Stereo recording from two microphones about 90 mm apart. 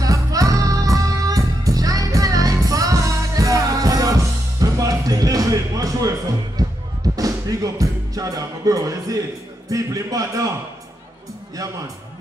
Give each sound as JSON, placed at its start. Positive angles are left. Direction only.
{"t": 0.0, "sound": "music", "side_deg": -40}
{"t": 9.7, "sound": "a man's voice", "side_deg": -40}